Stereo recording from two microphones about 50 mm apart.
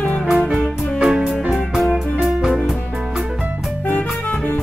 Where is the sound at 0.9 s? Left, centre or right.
Centre.